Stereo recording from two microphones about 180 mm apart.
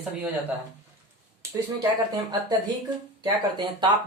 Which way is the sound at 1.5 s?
20° right (ahead or behind).